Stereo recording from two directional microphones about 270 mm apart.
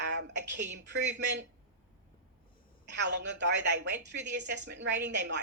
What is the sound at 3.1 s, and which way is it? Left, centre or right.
Speech, right.